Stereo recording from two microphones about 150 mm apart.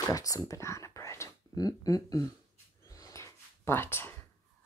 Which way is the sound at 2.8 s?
20° left (ahead or behind).